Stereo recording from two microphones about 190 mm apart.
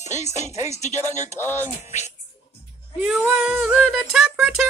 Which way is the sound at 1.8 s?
35° left (ahead or behind).